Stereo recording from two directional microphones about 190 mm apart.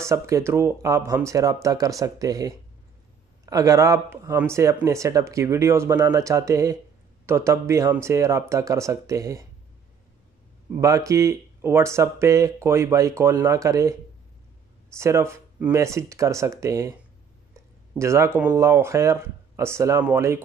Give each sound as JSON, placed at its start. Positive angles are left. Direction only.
{"t": 0.0, "sound": "speech", "side_deg": -15}
{"t": 10.8, "sound": "speech", "side_deg": -15}
{"t": 15.0, "sound": "speech", "side_deg": -15}
{"t": 17.9, "sound": "speech", "side_deg": -15}